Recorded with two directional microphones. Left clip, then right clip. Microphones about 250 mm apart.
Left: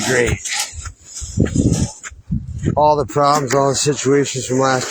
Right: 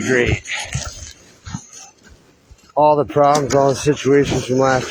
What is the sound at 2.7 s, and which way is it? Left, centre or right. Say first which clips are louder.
Speech: right 1 dB; left.